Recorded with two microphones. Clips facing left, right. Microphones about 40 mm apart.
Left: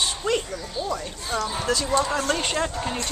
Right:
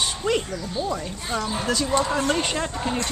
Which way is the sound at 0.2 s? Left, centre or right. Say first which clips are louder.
Right 1 dB; right.